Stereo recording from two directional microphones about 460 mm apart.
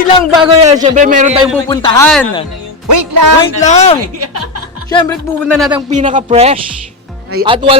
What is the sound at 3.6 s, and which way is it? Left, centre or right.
Speech, centre.